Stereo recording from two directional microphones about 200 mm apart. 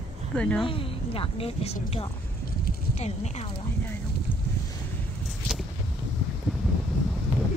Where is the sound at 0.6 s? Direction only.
25° left (ahead or behind).